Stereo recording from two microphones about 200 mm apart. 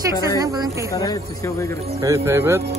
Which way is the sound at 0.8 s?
15° left (ahead or behind).